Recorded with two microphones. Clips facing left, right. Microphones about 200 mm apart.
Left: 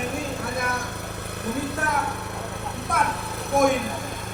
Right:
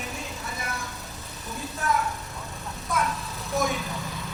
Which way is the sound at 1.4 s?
65° left (ahead or behind).